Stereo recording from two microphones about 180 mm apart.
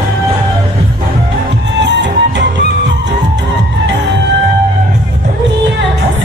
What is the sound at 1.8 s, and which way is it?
Music, 85° right.